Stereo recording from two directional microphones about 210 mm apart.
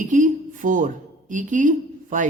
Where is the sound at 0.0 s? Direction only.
35° right (ahead or behind).